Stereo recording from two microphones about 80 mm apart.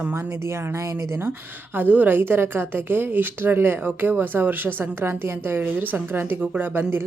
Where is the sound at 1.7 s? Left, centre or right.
Right.